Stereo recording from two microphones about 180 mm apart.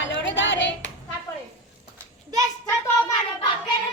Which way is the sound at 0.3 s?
90° left.